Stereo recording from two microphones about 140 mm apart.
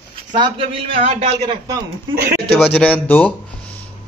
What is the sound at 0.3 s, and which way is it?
Speech, 40° right (ahead or behind).